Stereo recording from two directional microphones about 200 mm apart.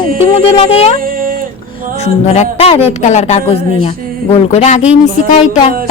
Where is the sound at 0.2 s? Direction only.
30° left (ahead or behind).